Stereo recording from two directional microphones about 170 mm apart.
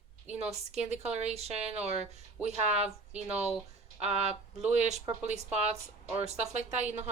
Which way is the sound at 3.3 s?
5° right (ahead or behind).